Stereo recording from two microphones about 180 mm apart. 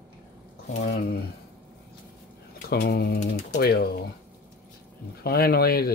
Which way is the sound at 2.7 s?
60° left (ahead or behind).